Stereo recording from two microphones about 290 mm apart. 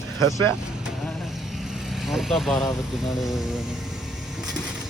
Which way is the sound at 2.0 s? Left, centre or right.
Centre.